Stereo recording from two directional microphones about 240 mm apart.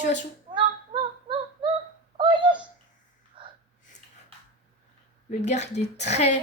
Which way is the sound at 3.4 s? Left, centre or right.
Right.